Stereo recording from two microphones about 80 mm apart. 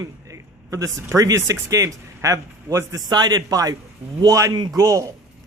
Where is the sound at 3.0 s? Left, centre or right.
Right.